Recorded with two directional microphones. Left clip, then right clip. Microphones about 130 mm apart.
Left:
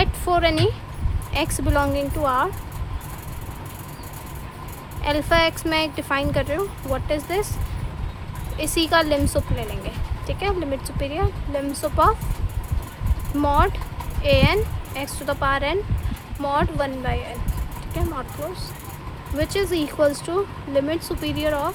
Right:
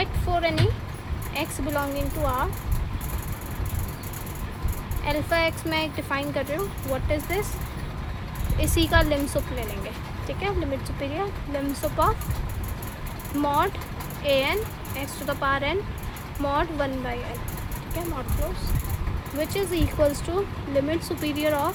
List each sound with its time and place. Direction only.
0.0 s a sound: 45° left (ahead or behind)
1.3 s speech: 40° left (ahead or behind)
5.0 s speech: 40° left (ahead or behind)
8.5 s speech: 25° left (ahead or behind)
11.0 s speech: 30° left (ahead or behind)
13.4 s speech: 30° left (ahead or behind)
19.4 s speech: 35° left (ahead or behind); by 21.7 s 20° left (ahead or behind)